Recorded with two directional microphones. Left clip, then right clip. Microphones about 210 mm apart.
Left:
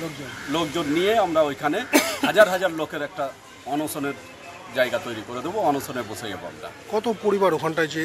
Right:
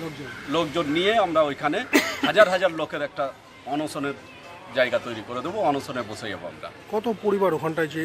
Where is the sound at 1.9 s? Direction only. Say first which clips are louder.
Left 2 dB; 30° left (ahead or behind).